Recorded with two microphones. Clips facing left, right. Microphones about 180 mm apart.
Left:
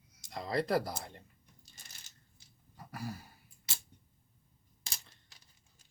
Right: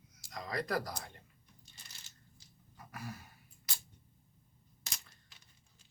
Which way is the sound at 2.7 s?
35° left (ahead or behind).